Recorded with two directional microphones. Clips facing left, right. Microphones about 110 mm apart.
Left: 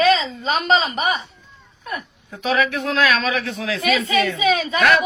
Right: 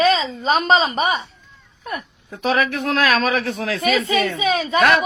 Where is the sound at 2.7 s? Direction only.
50° right (ahead or behind); by 4.4 s 35° right (ahead or behind).